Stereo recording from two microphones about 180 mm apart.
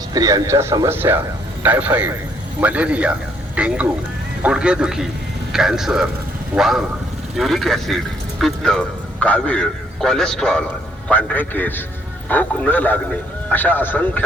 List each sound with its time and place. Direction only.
0.1 s a man's voice: 20° right (ahead or behind); by 14.3 s 10° left (ahead or behind)